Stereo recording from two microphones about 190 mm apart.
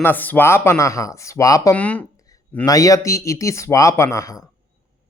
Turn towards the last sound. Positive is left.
turn(degrees=20)  # may be behind; listen again after turning